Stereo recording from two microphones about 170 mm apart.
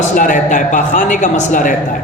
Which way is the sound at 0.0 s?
50° left (ahead or behind).